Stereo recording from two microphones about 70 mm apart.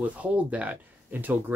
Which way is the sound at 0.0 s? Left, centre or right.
Right.